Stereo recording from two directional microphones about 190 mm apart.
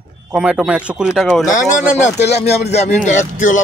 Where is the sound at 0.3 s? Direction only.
5° right (ahead or behind).